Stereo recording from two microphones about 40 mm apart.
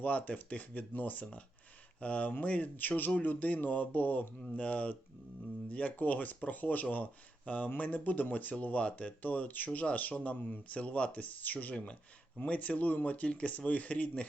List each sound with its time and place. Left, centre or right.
0.0 s speech: left
1.2 s speech: left
4.5 s speech: left
11.4 s speech: left